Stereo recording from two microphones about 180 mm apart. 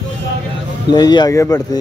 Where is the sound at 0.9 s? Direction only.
25° left (ahead or behind).